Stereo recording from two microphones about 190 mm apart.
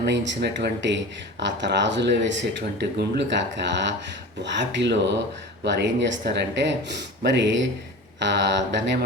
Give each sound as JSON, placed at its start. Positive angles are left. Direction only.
{"t": 0.0, "sound": "speech", "side_deg": -65}